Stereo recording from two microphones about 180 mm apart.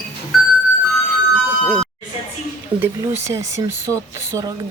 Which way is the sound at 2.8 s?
15° right (ahead or behind).